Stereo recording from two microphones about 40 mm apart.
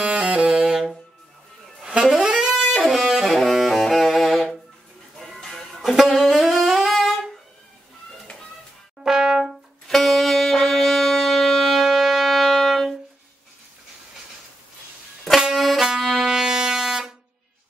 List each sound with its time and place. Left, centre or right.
0.0 s saxophone: right
0.7 s music: centre
1.8 s saxophone: centre
5.2 s music: centre
5.9 s saxophone: centre
8.3 s a sound: left
9.0 s brass instrument: centre
9.4 s brass instrument: centre
15.5 s music: centre
16.3 s music: centre